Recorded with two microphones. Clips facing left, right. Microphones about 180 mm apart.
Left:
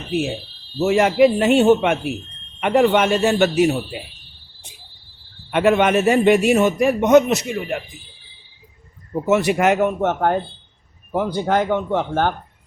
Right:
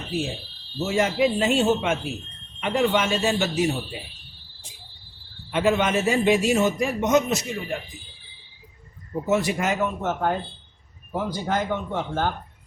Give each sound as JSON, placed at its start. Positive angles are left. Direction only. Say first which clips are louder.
{"t": 0.8, "sound": "a man's voice", "louder": "left 7 dB", "side_deg": 65}
{"t": 5.5, "sound": "a man's voice", "louder": "left 6 dB", "side_deg": 65}
{"t": 9.2, "sound": "a man's voice", "louder": "left 7 dB", "side_deg": 70}